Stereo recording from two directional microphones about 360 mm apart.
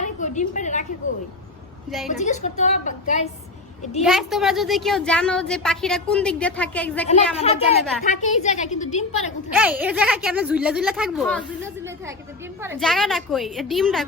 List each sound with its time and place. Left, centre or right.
0.0 s a sound: centre
2.0 s a woman's voice: centre
4.0 s a woman's voice: centre
7.3 s a woman's voice: centre
7.8 s a woman's voice: centre
8.0 s a woman's voice: centre
9.6 s a woman's voice: centre
12.6 s a woman's voice: centre